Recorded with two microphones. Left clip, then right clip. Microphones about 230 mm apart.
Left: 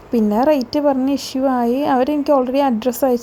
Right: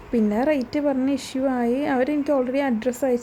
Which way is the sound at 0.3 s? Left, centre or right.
Centre.